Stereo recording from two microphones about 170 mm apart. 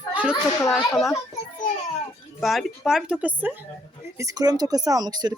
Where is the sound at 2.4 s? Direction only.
Centre (ahead or behind).